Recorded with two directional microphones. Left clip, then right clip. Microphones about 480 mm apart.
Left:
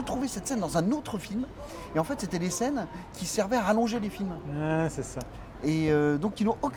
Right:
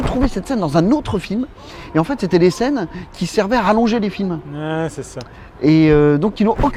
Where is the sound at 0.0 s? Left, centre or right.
Right.